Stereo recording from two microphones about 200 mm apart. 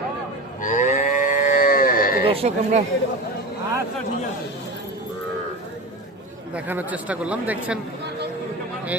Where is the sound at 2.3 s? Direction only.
30° right (ahead or behind).